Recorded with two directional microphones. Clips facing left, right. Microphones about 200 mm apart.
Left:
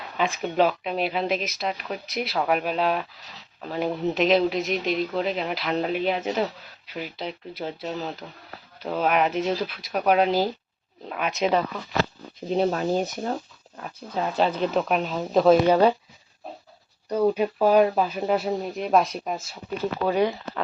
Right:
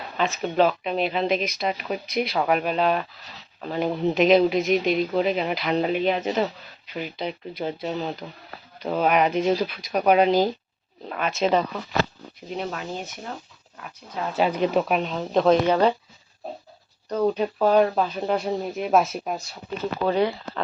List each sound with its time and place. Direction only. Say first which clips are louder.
0.2 s speech: right 1 dB; 10° left (ahead or behind)
12.5 s speech: left 8 dB; 35° left (ahead or behind)
14.3 s speech: right 2 dB; 10° right (ahead or behind); by 16.0 s 10° left (ahead or behind)
17.1 s speech: left 1 dB; 10° left (ahead or behind)
20.1 s speech: right 1 dB; 15° left (ahead or behind)